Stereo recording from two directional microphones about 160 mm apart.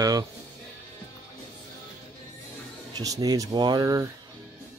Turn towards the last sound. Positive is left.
turn(degrees=-25)  # may be behind; listen again after turning